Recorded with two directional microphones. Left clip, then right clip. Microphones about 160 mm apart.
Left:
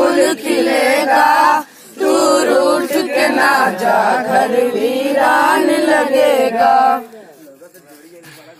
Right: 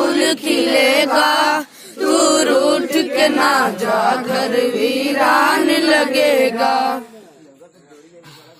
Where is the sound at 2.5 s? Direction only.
40° right (ahead or behind).